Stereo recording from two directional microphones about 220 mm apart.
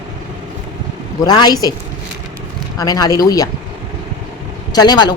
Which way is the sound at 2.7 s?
15° left (ahead or behind).